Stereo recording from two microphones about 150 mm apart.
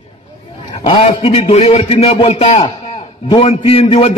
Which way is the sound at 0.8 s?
40° left (ahead or behind).